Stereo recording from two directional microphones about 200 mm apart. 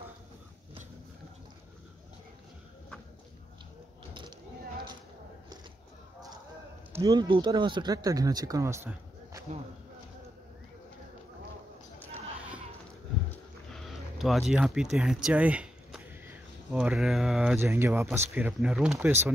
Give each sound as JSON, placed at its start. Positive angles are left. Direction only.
{"t": 6.9, "sound": "speech", "side_deg": -20}
{"t": 13.3, "sound": "a sound", "side_deg": 0}
{"t": 15.2, "sound": "speech", "side_deg": -5}